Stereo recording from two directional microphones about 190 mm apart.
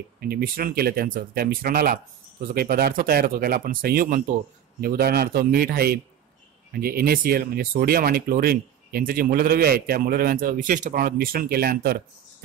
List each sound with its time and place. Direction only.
0.2 s speech: 50° right (ahead or behind)